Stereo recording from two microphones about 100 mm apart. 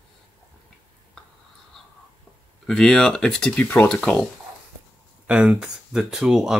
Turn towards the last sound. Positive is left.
turn(degrees=-5)  # may be behind; listen again after turning